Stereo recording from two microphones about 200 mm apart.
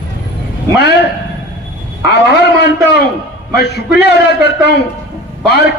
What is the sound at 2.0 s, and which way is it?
A man's voice, 55° left (ahead or behind).